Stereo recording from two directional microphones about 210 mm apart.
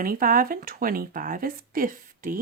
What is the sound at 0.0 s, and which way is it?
A woman's voice, 45° right (ahead or behind).